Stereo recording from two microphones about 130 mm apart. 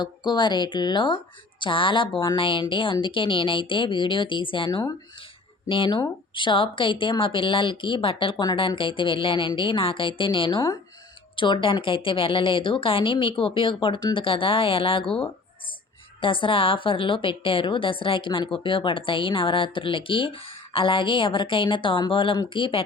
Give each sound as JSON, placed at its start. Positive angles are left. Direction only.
{"t": 0.0, "sound": "a woman's voice", "side_deg": 35}
{"t": 16.2, "sound": "a woman's voice", "side_deg": 40}